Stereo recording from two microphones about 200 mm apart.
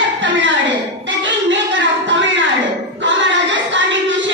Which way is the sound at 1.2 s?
65° right (ahead or behind).